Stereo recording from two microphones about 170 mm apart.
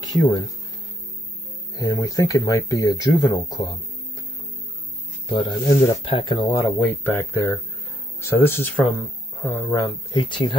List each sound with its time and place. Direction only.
0.0 s speech: 25° left (ahead or behind)
1.8 s speech: 25° left (ahead or behind)
5.4 s speech: 25° left (ahead or behind)
6.8 s speech: 10° left (ahead or behind)
10.2 s speech: 30° left (ahead or behind)